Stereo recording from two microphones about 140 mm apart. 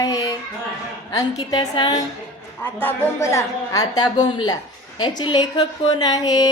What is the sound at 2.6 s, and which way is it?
A woman's voice, 15° left (ahead or behind).